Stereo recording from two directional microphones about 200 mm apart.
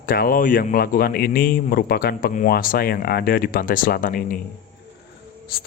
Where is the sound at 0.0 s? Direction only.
45° left (ahead or behind).